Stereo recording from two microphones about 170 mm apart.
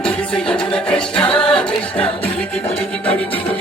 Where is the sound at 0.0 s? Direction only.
5° left (ahead or behind).